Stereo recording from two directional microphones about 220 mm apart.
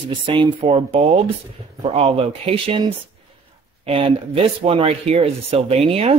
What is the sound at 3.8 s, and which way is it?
A man's voice, 25° right (ahead or behind).